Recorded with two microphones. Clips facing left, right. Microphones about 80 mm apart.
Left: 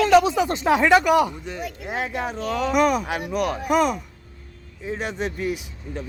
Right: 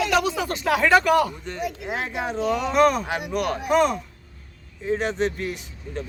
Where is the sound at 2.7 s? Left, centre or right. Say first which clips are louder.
Right 1 dB; centre.